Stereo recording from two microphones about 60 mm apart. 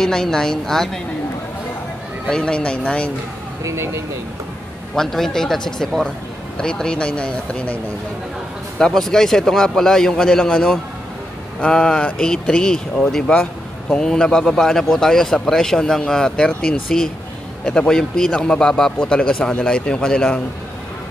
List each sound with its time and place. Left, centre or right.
0.0 s a man's voice: centre
2.2 s a man's voice: centre
3.6 s speech: right
4.9 s a man's voice: centre
8.7 s a man's voice: centre